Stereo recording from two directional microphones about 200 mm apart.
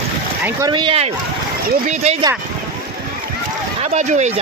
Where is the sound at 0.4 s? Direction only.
20° right (ahead or behind).